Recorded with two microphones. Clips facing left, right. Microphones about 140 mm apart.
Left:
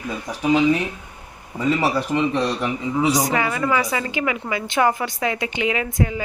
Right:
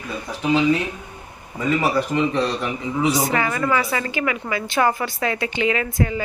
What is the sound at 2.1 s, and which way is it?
A woman's voice, 15° left (ahead or behind).